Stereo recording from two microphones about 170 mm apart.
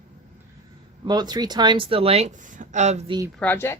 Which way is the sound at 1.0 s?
25° right (ahead or behind).